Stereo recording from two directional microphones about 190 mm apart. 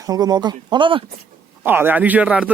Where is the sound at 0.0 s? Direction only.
20° right (ahead or behind).